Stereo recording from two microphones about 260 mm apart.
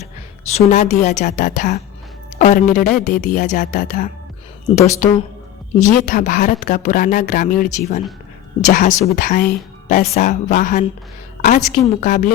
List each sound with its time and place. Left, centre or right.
0.5 s a woman's voice: left